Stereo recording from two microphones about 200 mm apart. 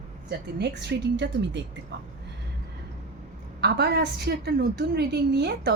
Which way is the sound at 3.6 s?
55° right (ahead or behind).